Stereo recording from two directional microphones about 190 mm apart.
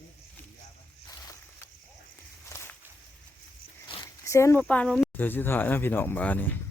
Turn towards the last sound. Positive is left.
turn(degrees=10)  # may be behind; listen again after turning